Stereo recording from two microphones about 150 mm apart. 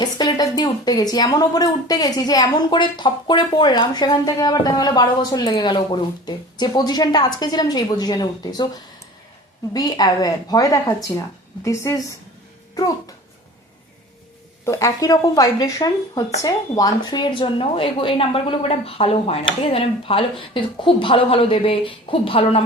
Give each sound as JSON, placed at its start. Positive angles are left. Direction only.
{"t": 0.0, "sound": "speech", "side_deg": 30}
{"t": 9.7, "sound": "speech", "side_deg": 25}
{"t": 14.6, "sound": "a woman's voice", "side_deg": 20}